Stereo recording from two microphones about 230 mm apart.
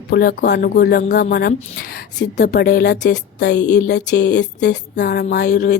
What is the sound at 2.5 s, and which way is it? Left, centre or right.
Speech, left.